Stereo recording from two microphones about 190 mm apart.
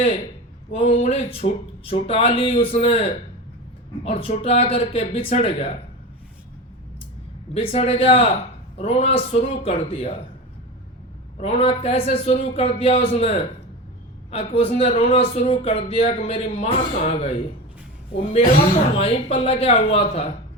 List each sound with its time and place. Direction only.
0.7 s a man's voice: 30° left (ahead or behind)
7.5 s a man's voice: 30° left (ahead or behind)
11.3 s a man's voice: 30° left (ahead or behind)
18.9 s a man's voice: 30° left (ahead or behind)